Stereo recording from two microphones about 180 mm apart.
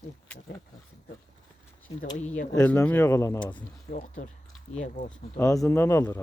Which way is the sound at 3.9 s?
40° left (ahead or behind).